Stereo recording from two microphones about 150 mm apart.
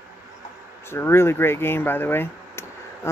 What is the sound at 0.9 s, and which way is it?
Speech, 15° left (ahead or behind).